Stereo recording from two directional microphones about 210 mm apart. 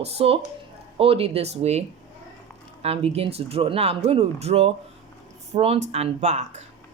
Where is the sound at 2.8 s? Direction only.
30° right (ahead or behind).